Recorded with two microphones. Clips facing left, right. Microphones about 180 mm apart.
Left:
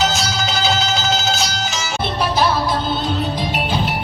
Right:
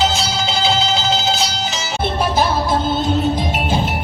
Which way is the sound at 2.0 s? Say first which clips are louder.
Right 1 dB; 50° right (ahead or behind).